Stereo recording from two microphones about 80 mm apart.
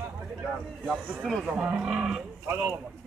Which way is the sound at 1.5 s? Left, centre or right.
Centre.